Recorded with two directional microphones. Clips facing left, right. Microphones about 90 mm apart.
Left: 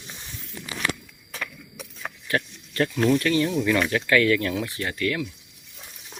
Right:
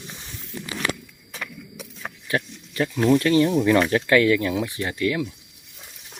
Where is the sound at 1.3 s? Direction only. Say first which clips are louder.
Even; 15° right (ahead or behind).